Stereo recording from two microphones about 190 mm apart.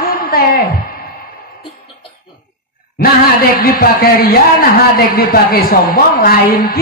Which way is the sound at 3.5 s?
50° left (ahead or behind).